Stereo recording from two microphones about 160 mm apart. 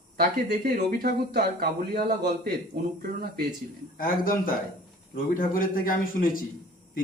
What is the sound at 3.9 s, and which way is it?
A man's voice, 65° left (ahead or behind).